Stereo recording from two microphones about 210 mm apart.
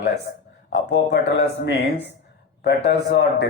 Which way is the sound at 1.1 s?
55° left (ahead or behind).